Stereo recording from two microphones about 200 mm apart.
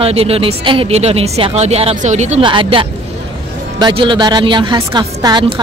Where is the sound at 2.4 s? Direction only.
25° right (ahead or behind).